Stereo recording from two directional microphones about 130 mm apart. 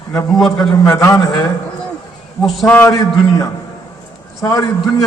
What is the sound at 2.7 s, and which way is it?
A man's voice, 20° left (ahead or behind).